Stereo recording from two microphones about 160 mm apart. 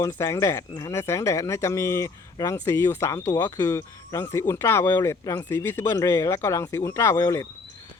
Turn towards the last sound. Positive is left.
turn(degrees=15)  # may be behind; listen again after turning